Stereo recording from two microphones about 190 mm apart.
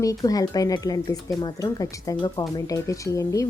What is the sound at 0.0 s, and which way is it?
Speech, 20° left (ahead or behind).